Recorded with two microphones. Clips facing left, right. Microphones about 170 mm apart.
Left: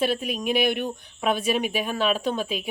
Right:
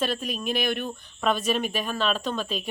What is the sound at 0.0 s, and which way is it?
Speech, 10° left (ahead or behind).